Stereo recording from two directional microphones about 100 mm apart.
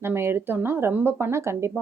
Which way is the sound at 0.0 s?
25° right (ahead or behind).